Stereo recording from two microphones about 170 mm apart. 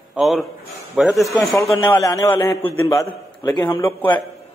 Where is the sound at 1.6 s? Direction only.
20° left (ahead or behind).